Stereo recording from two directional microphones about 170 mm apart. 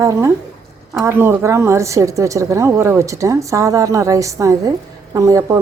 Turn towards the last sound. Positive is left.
turn(degrees=-20)  # may be behind; listen again after turning